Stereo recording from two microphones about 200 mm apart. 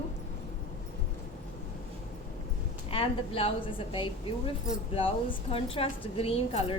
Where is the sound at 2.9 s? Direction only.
30° left (ahead or behind).